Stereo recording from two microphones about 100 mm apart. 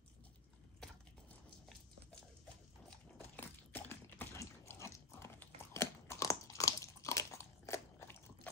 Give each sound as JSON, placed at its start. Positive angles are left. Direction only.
{"t": 3.3, "sound": "dog", "side_deg": 20}
{"t": 5.7, "sound": "crunch", "side_deg": 30}